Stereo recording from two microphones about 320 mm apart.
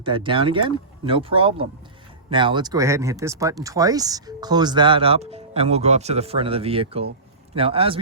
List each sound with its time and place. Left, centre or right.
0.0 s speech: centre